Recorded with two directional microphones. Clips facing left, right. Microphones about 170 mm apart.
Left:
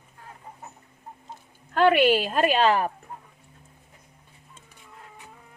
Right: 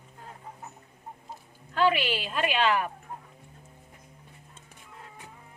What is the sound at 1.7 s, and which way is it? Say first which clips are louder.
A woman's voice: left 7 dB; 55° left (ahead or behind).